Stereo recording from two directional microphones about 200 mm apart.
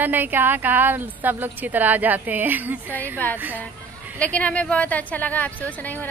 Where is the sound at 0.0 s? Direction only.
10° right (ahead or behind).